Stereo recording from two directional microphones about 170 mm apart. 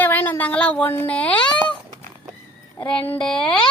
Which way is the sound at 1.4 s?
25° left (ahead or behind).